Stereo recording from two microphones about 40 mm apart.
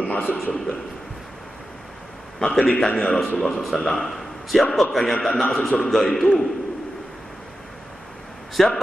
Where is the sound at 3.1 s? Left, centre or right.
Centre.